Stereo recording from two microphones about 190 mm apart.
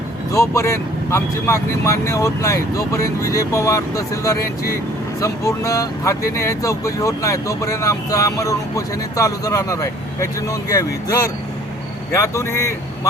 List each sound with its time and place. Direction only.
0.3 s speech: 15° left (ahead or behind)